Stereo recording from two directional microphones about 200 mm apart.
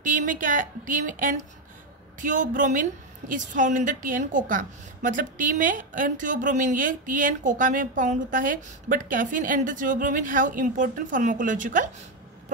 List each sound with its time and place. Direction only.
0.0 s a woman's voice: 40° right (ahead or behind)